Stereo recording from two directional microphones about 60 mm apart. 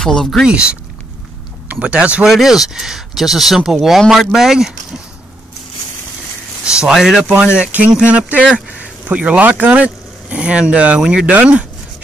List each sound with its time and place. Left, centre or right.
0.0 s speech: centre
1.7 s speech: centre
2.2 s speech: centre
6.6 s speech: centre
7.2 s speech: centre